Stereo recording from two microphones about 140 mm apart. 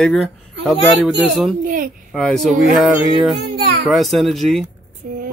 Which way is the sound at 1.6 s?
75° right (ahead or behind).